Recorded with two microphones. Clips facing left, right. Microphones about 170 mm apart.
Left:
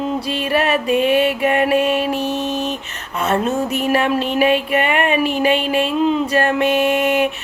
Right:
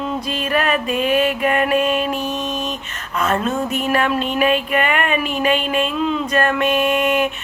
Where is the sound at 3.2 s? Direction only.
25° left (ahead or behind).